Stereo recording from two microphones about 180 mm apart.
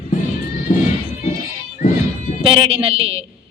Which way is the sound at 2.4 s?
30° right (ahead or behind).